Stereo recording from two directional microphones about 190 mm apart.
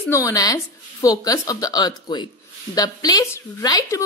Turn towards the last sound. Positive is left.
turn(degrees=20)  # may be behind; listen again after turning